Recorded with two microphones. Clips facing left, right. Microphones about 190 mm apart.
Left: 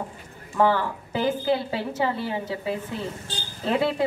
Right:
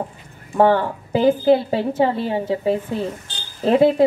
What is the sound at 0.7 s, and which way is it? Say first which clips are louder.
A woman's voice: right 7 dB; 25° right (ahead or behind).